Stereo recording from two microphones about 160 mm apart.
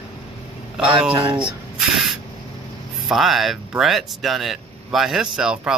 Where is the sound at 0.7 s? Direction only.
5° right (ahead or behind).